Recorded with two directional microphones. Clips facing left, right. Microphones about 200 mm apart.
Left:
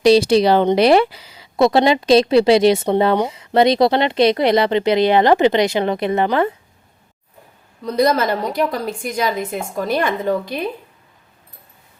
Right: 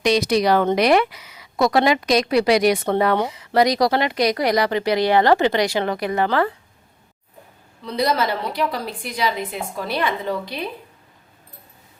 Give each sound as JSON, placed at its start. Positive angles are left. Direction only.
{"t": 0.0, "sound": "speech", "side_deg": 30}
{"t": 7.9, "sound": "a woman's voice", "side_deg": 45}